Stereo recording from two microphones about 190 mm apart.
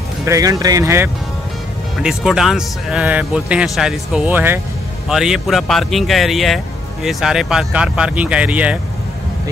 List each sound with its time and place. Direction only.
0.2 s speech: 15° right (ahead or behind)
2.0 s speech: 5° right (ahead or behind)